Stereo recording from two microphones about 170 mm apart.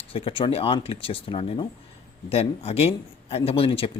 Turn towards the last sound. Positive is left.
turn(degrees=35)  # may be behind; listen again after turning